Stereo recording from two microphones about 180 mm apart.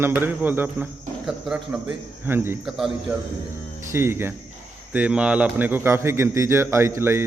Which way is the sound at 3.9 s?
15° right (ahead or behind).